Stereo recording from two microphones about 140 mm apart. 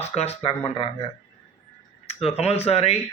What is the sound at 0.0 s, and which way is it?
Speech, 50° left (ahead or behind).